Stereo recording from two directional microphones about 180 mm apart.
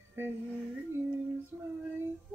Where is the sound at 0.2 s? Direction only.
10° right (ahead or behind).